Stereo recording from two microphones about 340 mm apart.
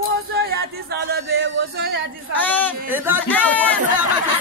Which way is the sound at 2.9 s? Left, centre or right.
Centre.